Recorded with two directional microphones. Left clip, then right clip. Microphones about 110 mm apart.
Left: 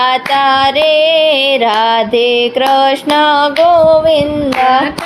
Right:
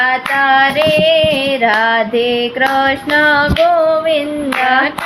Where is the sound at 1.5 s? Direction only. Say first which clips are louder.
Left 2 dB; 25° right (ahead or behind).